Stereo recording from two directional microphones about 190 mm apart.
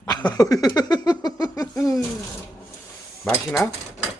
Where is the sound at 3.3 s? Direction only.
5° left (ahead or behind).